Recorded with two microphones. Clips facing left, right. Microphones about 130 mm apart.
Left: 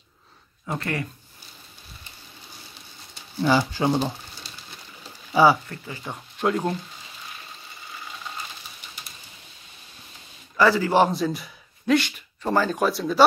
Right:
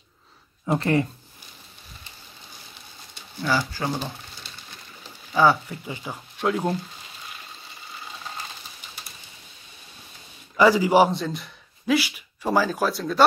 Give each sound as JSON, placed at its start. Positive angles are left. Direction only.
{"t": 0.7, "sound": "speech", "side_deg": -25}
{"t": 3.4, "sound": "speech", "side_deg": 20}
{"t": 5.3, "sound": "speech", "side_deg": 10}
{"t": 5.7, "sound": "speech", "side_deg": -10}
{"t": 6.1, "sound": "speech", "side_deg": 0}
{"t": 10.5, "sound": "a man's voice", "side_deg": -15}
{"t": 11.1, "sound": "speech", "side_deg": 0}